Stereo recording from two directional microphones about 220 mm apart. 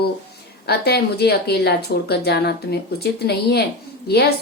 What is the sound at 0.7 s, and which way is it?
A woman's voice, 45° left (ahead or behind).